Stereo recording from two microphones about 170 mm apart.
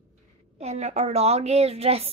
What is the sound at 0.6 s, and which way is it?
A woman's voice, 40° right (ahead or behind).